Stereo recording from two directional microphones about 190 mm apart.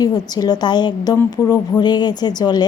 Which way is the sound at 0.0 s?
20° left (ahead or behind).